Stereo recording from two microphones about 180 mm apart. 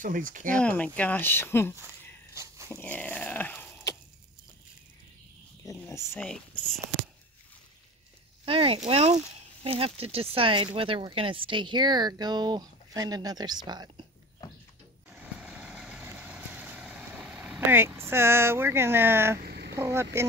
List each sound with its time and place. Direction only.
0.0 s speech: 50° right (ahead or behind)
0.6 s speech: 5° left (ahead or behind)
2.3 s dog: 15° right (ahead or behind)
2.7 s speech: 10° left (ahead or behind)
5.7 s speech: 15° left (ahead or behind)
6.2 s speech: 5° left (ahead or behind)
8.5 s speech: 30° right (ahead or behind)
15.3 s vehicle: 5° right (ahead or behind)
19.4 s a sound: 60° right (ahead or behind)
19.7 s speech: 15° right (ahead or behind)